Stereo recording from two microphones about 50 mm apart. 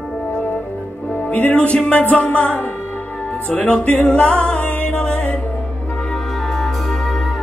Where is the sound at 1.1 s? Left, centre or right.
Left.